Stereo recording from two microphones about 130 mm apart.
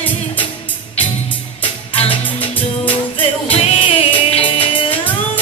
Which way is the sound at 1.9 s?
50° left (ahead or behind).